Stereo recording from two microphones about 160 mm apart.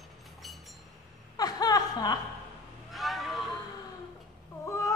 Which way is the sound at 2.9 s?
Centre (ahead or behind).